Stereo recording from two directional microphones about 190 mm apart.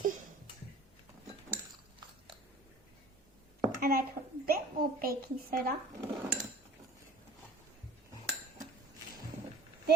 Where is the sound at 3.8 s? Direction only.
50° right (ahead or behind).